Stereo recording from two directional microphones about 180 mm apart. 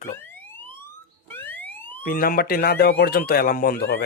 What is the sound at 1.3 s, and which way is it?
Alarm, 10° left (ahead or behind).